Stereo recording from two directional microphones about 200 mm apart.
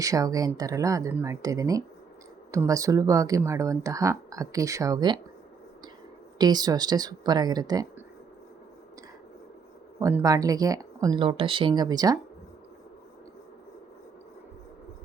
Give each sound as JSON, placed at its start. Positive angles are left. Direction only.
{"t": 0.0, "sound": "speech", "side_deg": -15}
{"t": 6.4, "sound": "speech", "side_deg": -20}
{"t": 10.0, "sound": "speech", "side_deg": -15}